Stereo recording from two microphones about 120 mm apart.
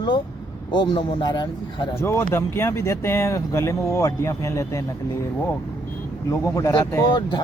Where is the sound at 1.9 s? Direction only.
20° left (ahead or behind).